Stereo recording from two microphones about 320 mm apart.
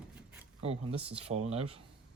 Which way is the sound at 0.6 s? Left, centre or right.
Centre.